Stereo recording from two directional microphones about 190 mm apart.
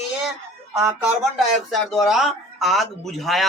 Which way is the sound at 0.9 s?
Centre (ahead or behind).